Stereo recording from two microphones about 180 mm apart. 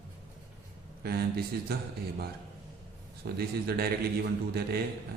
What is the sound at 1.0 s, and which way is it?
Speech, 60° right (ahead or behind).